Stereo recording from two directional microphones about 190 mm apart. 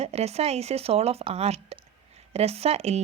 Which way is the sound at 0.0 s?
35° right (ahead or behind).